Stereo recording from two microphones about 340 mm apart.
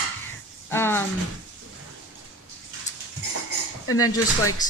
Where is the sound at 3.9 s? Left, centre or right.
Left.